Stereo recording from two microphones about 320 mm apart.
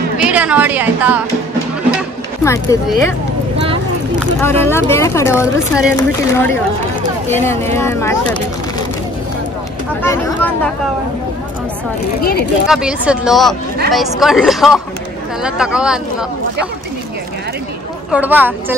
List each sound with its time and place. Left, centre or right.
0.2 s a woman's voice: centre
2.4 s speech: centre
4.4 s speech: centre
10.0 s speech: centre
12.2 s speech: left
12.6 s a woman's voice: centre
18.1 s a woman's voice: centre